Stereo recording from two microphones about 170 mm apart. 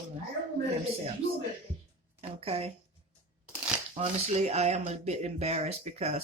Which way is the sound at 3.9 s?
40° right (ahead or behind).